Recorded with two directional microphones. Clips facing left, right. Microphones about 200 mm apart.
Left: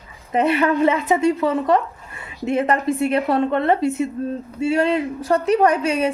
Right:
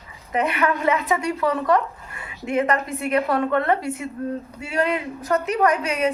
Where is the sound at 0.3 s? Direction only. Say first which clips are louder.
Left 5 dB; 30° left (ahead or behind).